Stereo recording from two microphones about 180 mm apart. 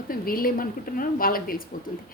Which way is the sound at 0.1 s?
55° left (ahead or behind).